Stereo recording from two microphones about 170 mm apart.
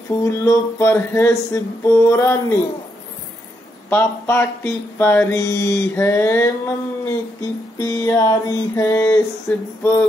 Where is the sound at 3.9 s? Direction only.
15° left (ahead or behind).